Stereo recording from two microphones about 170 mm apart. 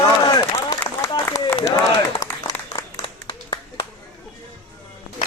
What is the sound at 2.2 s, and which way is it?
Applause, 20° left (ahead or behind).